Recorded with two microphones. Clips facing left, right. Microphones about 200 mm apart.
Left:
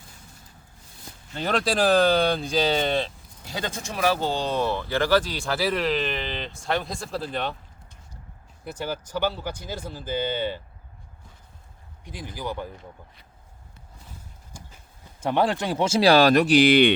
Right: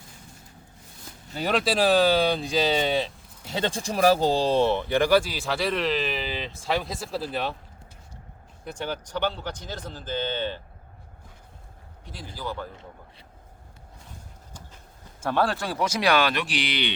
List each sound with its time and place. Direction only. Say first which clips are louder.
1.3 s speech: even; 5° right (ahead or behind)
3.4 s speech: right 4 dB; 25° right (ahead or behind); by 7.5 s 5° right (ahead or behind)
8.6 s speech: left 1 dB; 5° left (ahead or behind)
12.0 s speech: left 2 dB; 15° left (ahead or behind)
15.2 s speech: left 2 dB; 20° left (ahead or behind); by 16.9 s 50° left (ahead or behind)